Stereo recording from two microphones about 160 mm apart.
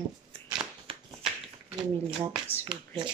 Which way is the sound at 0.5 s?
30° right (ahead or behind).